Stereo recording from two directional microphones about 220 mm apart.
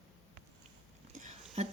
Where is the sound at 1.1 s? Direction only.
30° right (ahead or behind).